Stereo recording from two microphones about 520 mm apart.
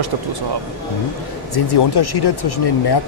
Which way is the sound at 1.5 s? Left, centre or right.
Left.